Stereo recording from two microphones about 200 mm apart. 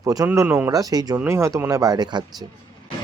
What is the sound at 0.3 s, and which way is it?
Speech, 10° right (ahead or behind).